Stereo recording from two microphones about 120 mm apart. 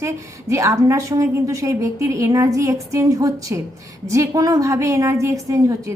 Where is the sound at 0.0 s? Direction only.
25° right (ahead or behind).